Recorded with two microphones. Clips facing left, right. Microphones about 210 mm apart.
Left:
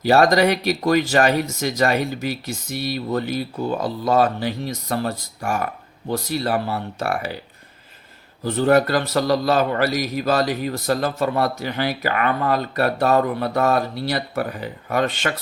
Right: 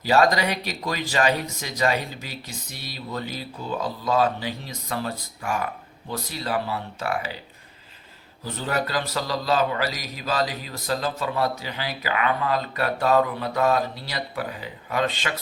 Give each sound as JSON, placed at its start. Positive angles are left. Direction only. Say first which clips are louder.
{"t": 0.1, "sound": "speech", "louder": "left 5 dB", "side_deg": 50}
{"t": 8.6, "sound": "speech", "louder": "left 9 dB", "side_deg": 50}